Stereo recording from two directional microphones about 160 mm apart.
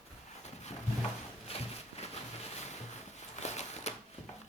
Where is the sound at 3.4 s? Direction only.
45° left (ahead or behind).